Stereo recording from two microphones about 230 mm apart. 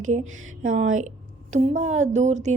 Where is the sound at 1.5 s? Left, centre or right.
Right.